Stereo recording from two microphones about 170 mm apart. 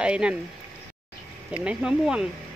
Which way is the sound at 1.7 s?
5° right (ahead or behind).